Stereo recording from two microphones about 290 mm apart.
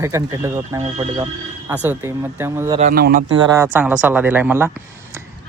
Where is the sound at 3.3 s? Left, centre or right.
Centre.